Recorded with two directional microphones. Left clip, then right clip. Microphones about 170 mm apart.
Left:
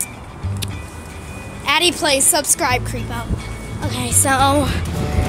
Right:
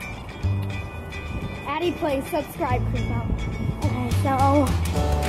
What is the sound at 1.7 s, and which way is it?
A woman's voice, 15° left (ahead or behind).